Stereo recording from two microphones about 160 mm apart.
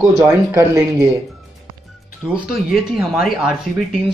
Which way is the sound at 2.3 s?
5° right (ahead or behind).